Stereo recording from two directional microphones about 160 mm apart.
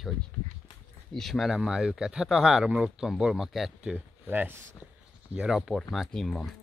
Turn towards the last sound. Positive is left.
turn(degrees=0)  # may be behind; listen again after turning